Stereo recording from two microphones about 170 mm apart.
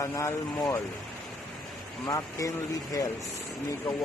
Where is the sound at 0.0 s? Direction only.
15° left (ahead or behind).